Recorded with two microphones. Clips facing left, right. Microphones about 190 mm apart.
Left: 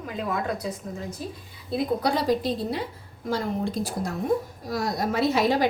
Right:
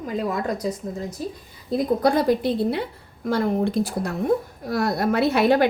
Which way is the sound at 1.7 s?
50° right (ahead or behind).